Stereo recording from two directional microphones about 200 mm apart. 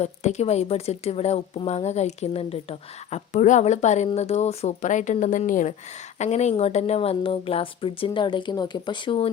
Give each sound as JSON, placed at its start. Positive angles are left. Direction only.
{"t": 0.0, "sound": "a woman's voice", "side_deg": 35}